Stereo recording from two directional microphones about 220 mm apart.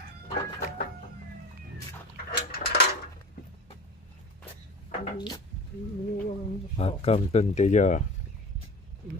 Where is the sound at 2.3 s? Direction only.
50° left (ahead or behind).